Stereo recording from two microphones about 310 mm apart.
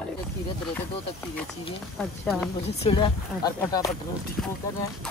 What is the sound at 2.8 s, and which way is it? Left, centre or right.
Speech, centre.